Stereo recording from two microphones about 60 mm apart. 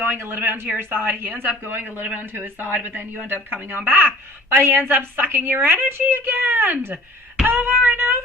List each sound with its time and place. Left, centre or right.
0.0 s speech: right